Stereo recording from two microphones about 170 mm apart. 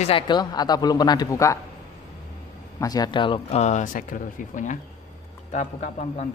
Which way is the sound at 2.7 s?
20° left (ahead or behind).